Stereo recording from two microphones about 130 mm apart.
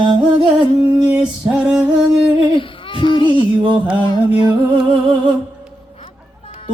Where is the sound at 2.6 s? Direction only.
40° left (ahead or behind).